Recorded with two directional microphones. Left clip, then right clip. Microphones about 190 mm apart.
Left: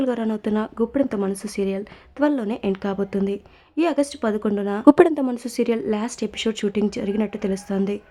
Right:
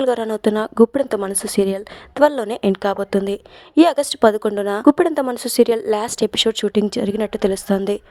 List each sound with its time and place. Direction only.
0.0 s a woman's voice: 40° right (ahead or behind)
4.9 s speech: centre (ahead or behind)
5.2 s a woman's voice: 35° right (ahead or behind)